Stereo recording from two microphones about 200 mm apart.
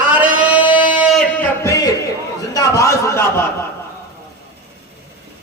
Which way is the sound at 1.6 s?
15° left (ahead or behind).